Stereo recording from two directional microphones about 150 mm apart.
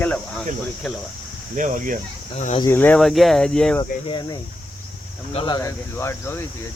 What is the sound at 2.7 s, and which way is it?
Speech, 15° left (ahead or behind).